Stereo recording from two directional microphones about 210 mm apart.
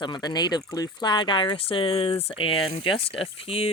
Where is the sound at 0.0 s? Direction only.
20° left (ahead or behind).